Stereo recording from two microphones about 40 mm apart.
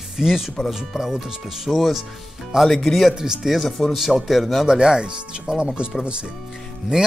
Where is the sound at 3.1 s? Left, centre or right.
Centre.